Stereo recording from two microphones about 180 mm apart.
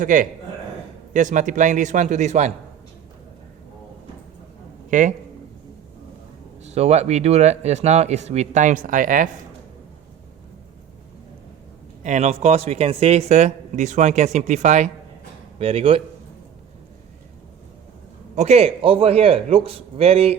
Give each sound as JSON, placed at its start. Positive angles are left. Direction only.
{"t": 0.0, "sound": "a man's voice", "side_deg": -45}
{"t": 4.9, "sound": "speech", "side_deg": -45}
{"t": 6.6, "sound": "speech", "side_deg": -35}
{"t": 12.0, "sound": "speech", "side_deg": -40}
{"t": 18.3, "sound": "speech", "side_deg": -35}